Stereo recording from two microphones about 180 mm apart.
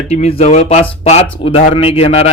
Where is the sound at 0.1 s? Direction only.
35° left (ahead or behind).